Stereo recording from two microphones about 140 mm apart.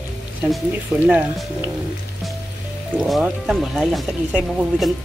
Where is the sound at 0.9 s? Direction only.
10° right (ahead or behind).